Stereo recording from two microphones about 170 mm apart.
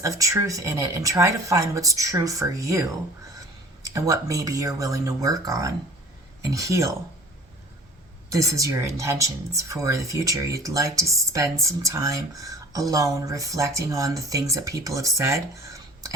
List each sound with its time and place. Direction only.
0.0 s speech: 20° right (ahead or behind)
3.9 s speech: 20° right (ahead or behind)
8.3 s speech: 20° right (ahead or behind)